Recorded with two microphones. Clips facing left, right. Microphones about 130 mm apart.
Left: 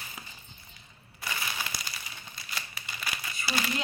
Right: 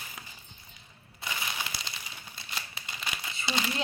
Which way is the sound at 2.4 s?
25° right (ahead or behind).